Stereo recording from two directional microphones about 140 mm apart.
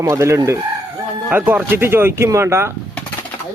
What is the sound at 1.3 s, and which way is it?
Speech, 10° right (ahead or behind).